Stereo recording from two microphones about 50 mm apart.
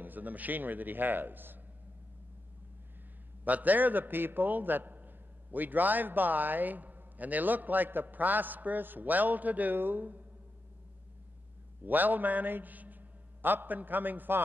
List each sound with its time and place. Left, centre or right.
0.0 s a man's voice: right
3.4 s a man's voice: right
11.8 s a man's voice: right